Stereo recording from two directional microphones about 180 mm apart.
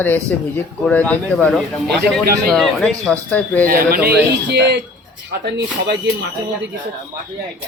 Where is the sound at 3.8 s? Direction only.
55° right (ahead or behind).